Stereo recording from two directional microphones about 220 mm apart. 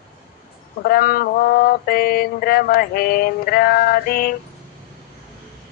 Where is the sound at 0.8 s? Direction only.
45° left (ahead or behind).